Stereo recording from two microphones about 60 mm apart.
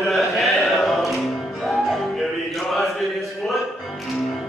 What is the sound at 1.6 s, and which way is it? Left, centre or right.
Music, centre.